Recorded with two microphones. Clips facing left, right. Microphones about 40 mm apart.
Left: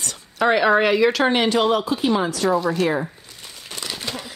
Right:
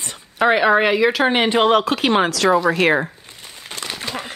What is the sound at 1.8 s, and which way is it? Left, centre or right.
Speech, right.